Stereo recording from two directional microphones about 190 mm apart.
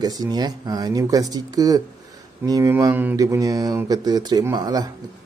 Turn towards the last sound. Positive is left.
turn(degrees=-20)  # may be behind; listen again after turning